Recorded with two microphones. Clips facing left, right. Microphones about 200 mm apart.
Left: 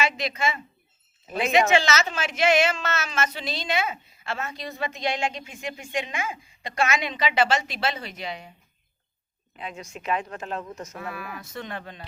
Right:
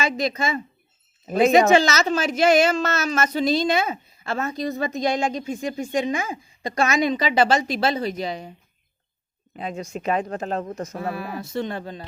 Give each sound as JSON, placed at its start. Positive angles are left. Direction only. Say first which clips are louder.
{"t": 0.0, "sound": "a woman's voice", "louder": "right 3 dB", "side_deg": -40}
{"t": 9.6, "sound": "a woman's voice", "louder": "right 7 dB", "side_deg": -40}